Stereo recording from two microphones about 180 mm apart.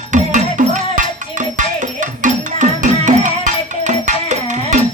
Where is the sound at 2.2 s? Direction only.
45° right (ahead or behind).